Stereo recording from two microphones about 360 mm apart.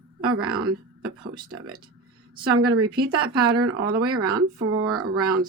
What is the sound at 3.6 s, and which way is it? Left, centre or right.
Speech, right.